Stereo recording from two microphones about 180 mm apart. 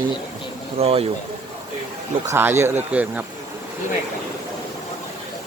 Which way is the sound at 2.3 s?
15° right (ahead or behind).